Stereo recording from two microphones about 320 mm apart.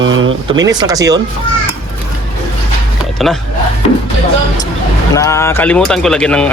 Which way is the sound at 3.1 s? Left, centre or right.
Centre.